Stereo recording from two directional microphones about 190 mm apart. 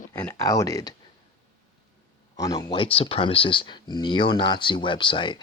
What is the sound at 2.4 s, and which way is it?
Speech, 20° left (ahead or behind).